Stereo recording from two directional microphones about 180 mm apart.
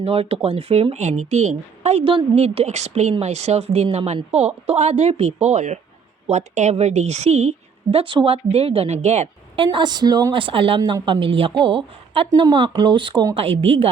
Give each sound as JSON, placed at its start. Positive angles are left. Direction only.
{"t": 0.0, "sound": "speech", "side_deg": -30}
{"t": 9.7, "sound": "speech", "side_deg": -25}